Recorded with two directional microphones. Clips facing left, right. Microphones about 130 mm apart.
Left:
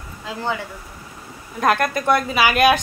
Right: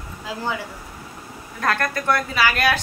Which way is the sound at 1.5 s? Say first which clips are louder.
Left 4 dB; 20° left (ahead or behind).